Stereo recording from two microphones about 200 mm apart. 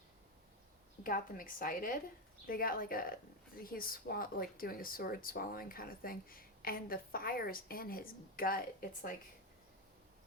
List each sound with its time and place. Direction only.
1.0 s a woman's voice: 45° left (ahead or behind)